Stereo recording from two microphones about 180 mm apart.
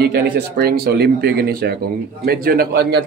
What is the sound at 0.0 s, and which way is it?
Speech, 65° right (ahead or behind).